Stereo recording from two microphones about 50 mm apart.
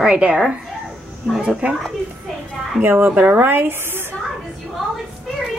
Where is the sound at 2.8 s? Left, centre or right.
Right.